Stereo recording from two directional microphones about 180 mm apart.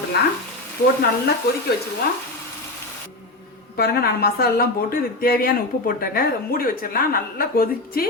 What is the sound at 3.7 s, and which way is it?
Speech, 60° left (ahead or behind).